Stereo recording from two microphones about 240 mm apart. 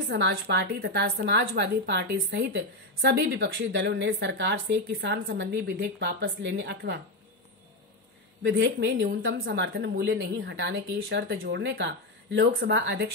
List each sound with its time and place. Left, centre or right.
0.1 s a woman's voice: right
8.5 s a woman's voice: right